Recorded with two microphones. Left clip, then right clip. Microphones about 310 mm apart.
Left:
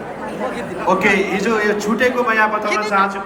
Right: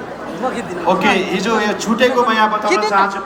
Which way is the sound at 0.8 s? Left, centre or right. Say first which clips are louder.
Right 1 dB; centre.